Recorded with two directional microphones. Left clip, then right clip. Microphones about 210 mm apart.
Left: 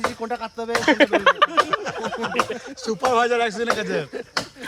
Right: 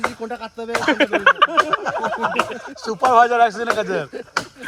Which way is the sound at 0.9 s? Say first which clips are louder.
Right 1 dB; 50° left (ahead or behind).